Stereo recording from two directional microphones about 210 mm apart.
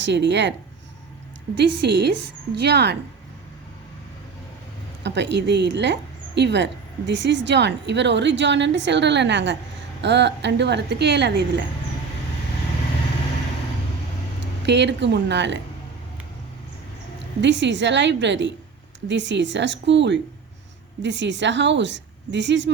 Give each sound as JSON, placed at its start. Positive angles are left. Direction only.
{"t": 0.0, "sound": "a woman's voice", "side_deg": -55}
{"t": 1.5, "sound": "a woman's voice", "side_deg": -55}
{"t": 5.0, "sound": "a woman's voice", "side_deg": -55}
{"t": 14.7, "sound": "a woman's voice", "side_deg": -55}
{"t": 17.4, "sound": "a woman's voice", "side_deg": -60}